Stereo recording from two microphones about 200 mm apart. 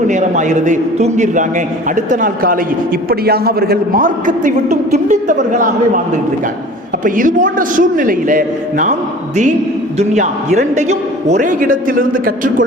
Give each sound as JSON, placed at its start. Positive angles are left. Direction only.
{"t": 0.1, "sound": "a man's voice", "side_deg": -35}
{"t": 7.0, "sound": "a man's voice", "side_deg": -40}